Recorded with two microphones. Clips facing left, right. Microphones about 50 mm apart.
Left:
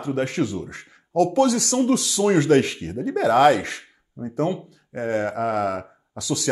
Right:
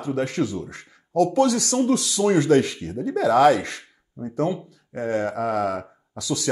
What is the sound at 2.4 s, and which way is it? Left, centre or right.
Speech, left.